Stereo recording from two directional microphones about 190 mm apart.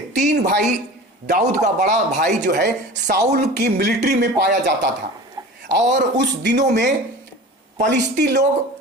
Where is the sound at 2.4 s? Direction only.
60° right (ahead or behind).